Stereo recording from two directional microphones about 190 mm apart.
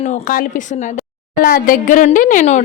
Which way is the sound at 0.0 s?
40° left (ahead or behind).